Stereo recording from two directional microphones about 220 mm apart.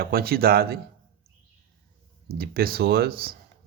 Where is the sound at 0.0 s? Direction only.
45° right (ahead or behind).